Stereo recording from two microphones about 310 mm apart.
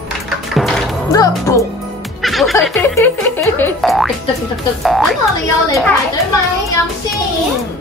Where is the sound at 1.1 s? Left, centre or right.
Centre.